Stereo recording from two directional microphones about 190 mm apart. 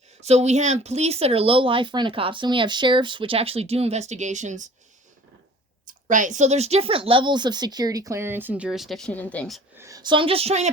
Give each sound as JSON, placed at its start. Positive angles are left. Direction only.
{"t": 0.2, "sound": "speech", "side_deg": -35}
{"t": 6.1, "sound": "a woman's voice", "side_deg": -40}
{"t": 9.7, "sound": "a woman's voice", "side_deg": -15}